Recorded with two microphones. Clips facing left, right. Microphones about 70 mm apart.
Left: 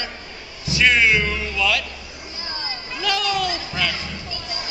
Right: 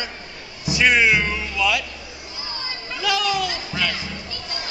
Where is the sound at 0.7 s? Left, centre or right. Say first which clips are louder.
Even; centre.